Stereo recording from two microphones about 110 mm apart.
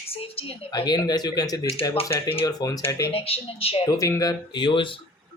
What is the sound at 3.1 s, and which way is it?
Speech, 60° left (ahead or behind).